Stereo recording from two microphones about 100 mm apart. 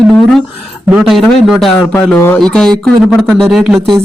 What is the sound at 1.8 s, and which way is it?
Speech, 15° left (ahead or behind).